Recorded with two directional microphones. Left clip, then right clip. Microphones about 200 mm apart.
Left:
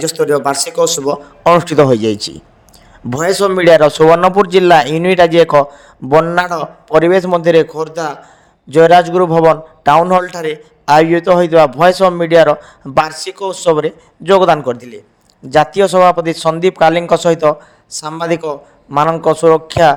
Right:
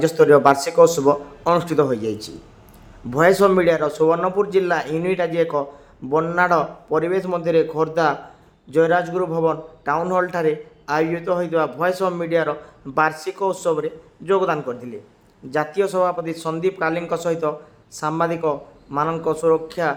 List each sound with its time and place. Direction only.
0.2 s speech: centre (ahead or behind)
0.9 s a man's voice: 35° left (ahead or behind)